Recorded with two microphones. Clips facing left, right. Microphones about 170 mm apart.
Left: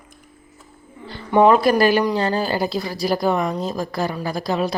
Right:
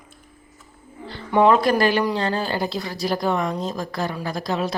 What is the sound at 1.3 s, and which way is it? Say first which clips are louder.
A woman's voice: left 2 dB; 5° left (ahead or behind).